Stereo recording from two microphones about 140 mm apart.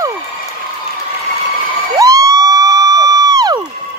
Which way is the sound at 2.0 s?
25° right (ahead or behind).